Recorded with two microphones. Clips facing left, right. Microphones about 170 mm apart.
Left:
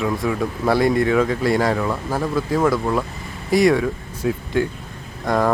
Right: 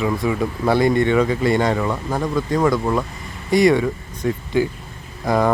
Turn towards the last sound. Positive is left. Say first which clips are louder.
# right 1 dB
turn(degrees=0)  # may be behind; listen again after turning